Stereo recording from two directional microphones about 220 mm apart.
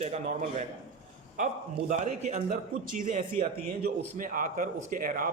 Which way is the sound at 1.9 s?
30° right (ahead or behind).